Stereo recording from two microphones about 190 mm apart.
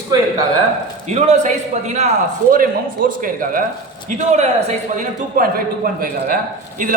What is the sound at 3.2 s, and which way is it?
A man's voice, 45° right (ahead or behind).